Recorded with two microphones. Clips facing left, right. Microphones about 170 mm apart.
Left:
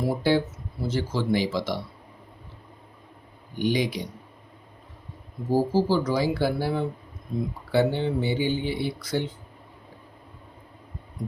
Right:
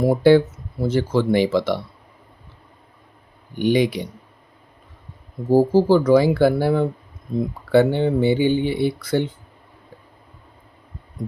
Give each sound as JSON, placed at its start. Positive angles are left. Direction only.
{"t": 0.0, "sound": "speech", "side_deg": -60}
{"t": 3.6, "sound": "speech", "side_deg": -60}
{"t": 5.5, "sound": "speech", "side_deg": -55}